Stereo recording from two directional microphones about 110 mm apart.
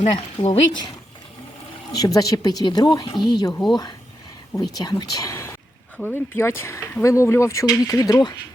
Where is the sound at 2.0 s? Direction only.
35° left (ahead or behind).